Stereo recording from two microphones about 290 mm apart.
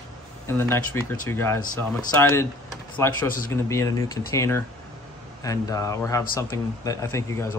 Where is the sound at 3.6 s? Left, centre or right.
Centre.